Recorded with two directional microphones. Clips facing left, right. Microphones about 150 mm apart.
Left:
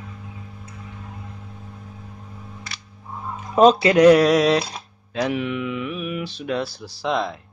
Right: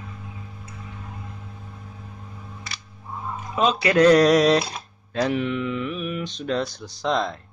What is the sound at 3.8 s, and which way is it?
Speech, 15° left (ahead or behind).